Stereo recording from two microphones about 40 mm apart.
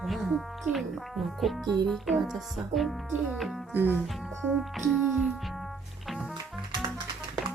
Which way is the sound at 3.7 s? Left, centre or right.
Right.